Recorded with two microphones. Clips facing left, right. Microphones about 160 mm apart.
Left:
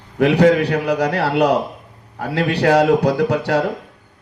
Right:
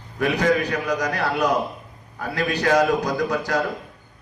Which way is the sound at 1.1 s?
75° left (ahead or behind).